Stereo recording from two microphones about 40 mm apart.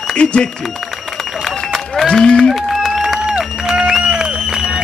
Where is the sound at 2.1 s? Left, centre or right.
Left.